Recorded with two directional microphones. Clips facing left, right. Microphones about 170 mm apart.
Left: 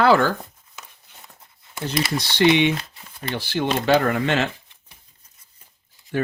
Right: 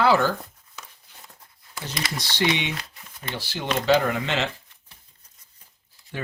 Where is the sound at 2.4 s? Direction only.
60° left (ahead or behind).